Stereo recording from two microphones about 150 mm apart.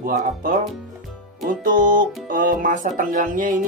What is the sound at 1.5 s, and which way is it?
Music, 60° right (ahead or behind).